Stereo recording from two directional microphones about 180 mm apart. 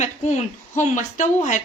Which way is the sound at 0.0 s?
40° left (ahead or behind).